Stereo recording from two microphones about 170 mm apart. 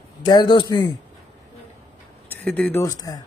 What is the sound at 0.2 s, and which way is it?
Speech, 25° left (ahead or behind).